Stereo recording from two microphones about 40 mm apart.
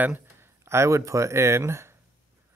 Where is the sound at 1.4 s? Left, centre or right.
Right.